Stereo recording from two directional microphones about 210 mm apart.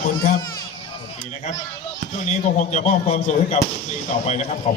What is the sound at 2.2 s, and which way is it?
Speech, 35° left (ahead or behind).